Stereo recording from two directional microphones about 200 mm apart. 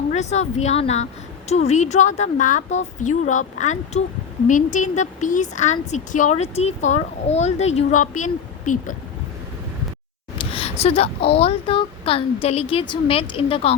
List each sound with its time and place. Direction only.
0.1 s a woman's voice: 35° left (ahead or behind)
10.3 s a sound: 25° left (ahead or behind)
11.3 s a woman's voice: 30° left (ahead or behind)